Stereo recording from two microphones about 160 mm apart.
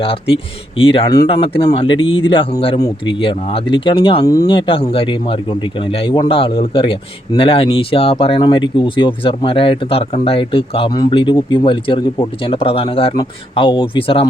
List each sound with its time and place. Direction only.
0.0 s speech: 35° left (ahead or behind)
1.0 s speech: 20° left (ahead or behind)
1.3 s speech: 35° left (ahead or behind)